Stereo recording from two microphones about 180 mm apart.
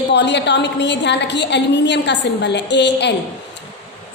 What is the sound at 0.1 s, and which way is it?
A woman's voice, 75° left (ahead or behind).